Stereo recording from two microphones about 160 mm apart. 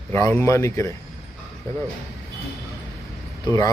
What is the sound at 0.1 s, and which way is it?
Speech, 15° left (ahead or behind).